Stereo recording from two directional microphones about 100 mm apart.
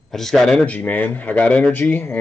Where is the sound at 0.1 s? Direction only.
5° left (ahead or behind).